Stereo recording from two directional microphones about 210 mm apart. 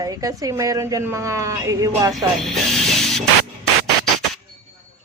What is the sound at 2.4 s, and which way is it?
Music, centre (ahead or behind).